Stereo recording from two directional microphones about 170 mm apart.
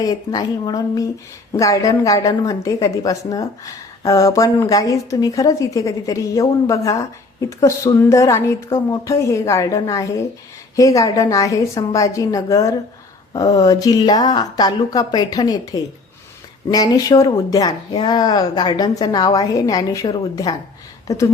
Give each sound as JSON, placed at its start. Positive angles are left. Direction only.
{"t": 0.0, "sound": "a woman's voice", "side_deg": 20}